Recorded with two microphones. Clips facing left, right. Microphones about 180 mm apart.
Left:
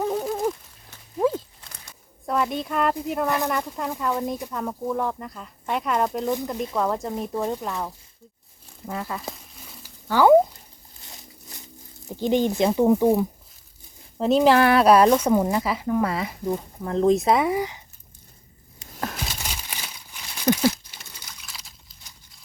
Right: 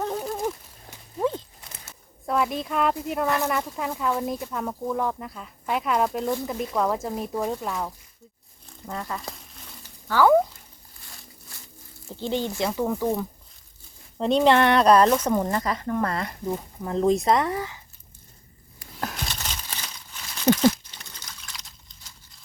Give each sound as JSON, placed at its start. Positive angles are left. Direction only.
{"t": 0.0, "sound": "a sound", "side_deg": 5}
{"t": 1.8, "sound": "speech", "side_deg": 0}
{"t": 3.2, "sound": "speech", "side_deg": 15}
{"t": 3.5, "sound": "speech", "side_deg": 0}
{"t": 9.3, "sound": "crumpling", "side_deg": 5}
{"t": 10.1, "sound": "speech", "side_deg": 20}
{"t": 11.0, "sound": "a sound", "side_deg": 20}
{"t": 12.0, "sound": "speech", "side_deg": 15}
{"t": 14.2, "sound": "speech", "side_deg": 5}
{"t": 18.9, "sound": "crumpling", "side_deg": 0}